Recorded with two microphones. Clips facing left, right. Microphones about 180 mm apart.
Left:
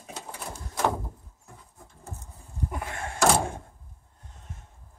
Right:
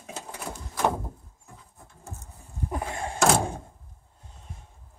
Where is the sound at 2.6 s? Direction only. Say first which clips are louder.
Right 3 dB; 30° right (ahead or behind).